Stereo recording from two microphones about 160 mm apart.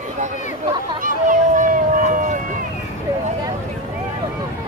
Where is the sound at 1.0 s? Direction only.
55° right (ahead or behind).